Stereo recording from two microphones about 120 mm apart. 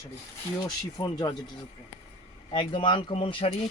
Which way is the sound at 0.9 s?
35° left (ahead or behind).